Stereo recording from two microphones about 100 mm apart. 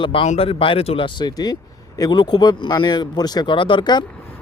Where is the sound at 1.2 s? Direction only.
40° left (ahead or behind).